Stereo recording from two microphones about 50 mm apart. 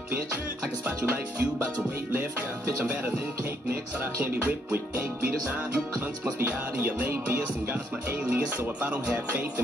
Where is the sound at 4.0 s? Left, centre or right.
Right.